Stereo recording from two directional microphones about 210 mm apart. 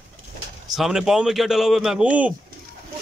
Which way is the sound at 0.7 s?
Centre (ahead or behind).